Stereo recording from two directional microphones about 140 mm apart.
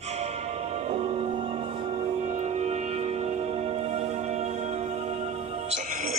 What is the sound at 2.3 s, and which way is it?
Music, 50° right (ahead or behind).